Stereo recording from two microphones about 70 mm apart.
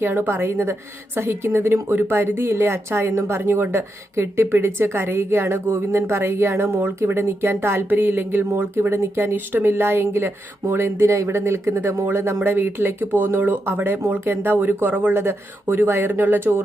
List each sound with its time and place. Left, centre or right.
0.0 s a woman's voice: right